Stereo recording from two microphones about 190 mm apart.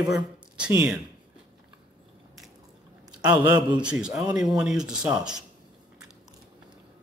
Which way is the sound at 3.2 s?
10° right (ahead or behind).